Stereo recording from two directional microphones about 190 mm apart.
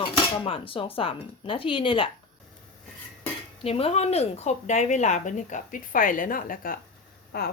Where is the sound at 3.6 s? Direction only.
30° left (ahead or behind); by 7.5 s 55° left (ahead or behind).